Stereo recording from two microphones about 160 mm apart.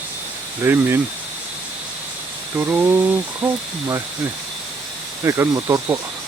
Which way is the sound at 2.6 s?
10° right (ahead or behind).